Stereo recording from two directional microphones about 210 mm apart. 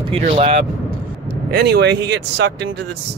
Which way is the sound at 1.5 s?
50° right (ahead or behind).